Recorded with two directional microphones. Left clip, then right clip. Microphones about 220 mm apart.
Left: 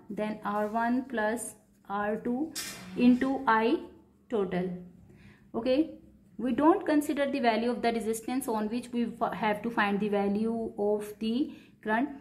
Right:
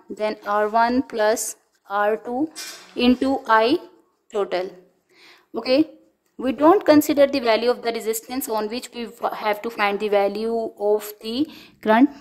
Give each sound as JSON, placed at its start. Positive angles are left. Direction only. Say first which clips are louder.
{"t": 0.2, "sound": "a woman's voice", "louder": "right 10 dB", "side_deg": -50}